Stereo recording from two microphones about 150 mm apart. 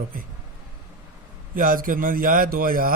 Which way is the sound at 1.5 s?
70° right (ahead or behind).